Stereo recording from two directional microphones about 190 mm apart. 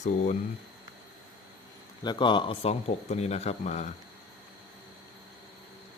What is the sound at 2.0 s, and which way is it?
Speech, 25° left (ahead or behind).